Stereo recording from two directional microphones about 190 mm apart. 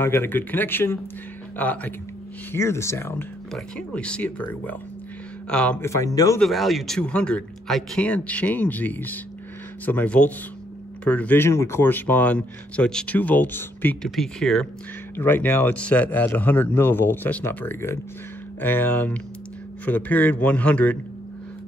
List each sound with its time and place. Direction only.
0.0 s speech: 10° left (ahead or behind)
6.4 s speech: centre (ahead or behind)